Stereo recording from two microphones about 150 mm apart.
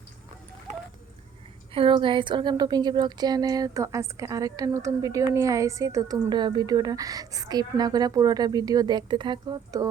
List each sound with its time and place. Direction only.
1.7 s speech: 35° right (ahead or behind)